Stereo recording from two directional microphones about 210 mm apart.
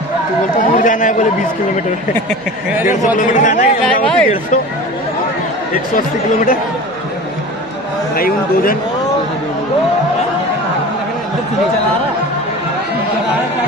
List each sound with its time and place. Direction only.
0.6 s chatter: 40° left (ahead or behind)
3.2 s speech: 35° left (ahead or behind)
3.8 s speech: 5° left (ahead or behind)
5.9 s speech: 40° left (ahead or behind)